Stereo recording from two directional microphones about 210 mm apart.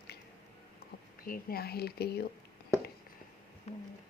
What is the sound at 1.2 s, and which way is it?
Speech, 45° left (ahead or behind).